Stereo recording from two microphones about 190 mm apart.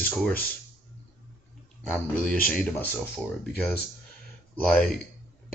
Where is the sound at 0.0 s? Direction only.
Centre (ahead or behind).